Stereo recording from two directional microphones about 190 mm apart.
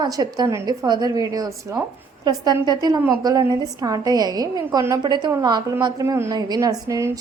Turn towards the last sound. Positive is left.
turn(degrees=-15)  # may be behind; listen again after turning